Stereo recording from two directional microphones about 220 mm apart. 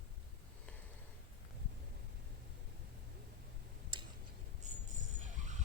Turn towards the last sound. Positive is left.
turn(degrees=-35)  # may be behind; listen again after turning